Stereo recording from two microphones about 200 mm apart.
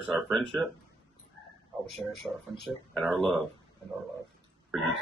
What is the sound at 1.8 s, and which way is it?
Speech, centre (ahead or behind).